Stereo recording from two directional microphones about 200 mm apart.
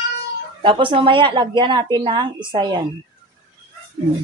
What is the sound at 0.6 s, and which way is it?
A woman's voice, 25° right (ahead or behind).